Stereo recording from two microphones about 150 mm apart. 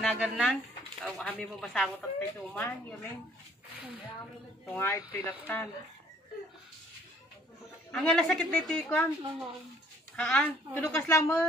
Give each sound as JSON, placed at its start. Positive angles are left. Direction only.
{"t": 0.0, "sound": "a woman's voice", "side_deg": 5}
{"t": 2.0, "sound": "a woman's voice", "side_deg": 15}
{"t": 4.7, "sound": "a woman's voice", "side_deg": 15}
{"t": 7.9, "sound": "a woman's voice", "side_deg": 5}
{"t": 10.1, "sound": "a woman's voice", "side_deg": 10}